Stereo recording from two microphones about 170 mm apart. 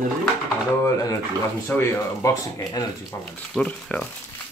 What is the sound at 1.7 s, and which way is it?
Speech, 15° left (ahead or behind).